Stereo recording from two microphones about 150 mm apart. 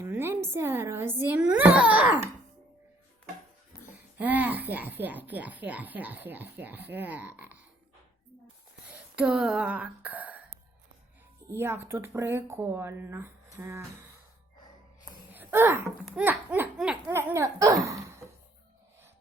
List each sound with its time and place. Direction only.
0.0 s a woman's voice: 15° right (ahead or behind)
4.2 s speech: 10° right (ahead or behind)
9.1 s speech: 5° right (ahead or behind)
11.4 s speech: 15° right (ahead or behind)
15.3 s a sound: 15° right (ahead or behind)
16.1 s a child's voice: 10° right (ahead or behind)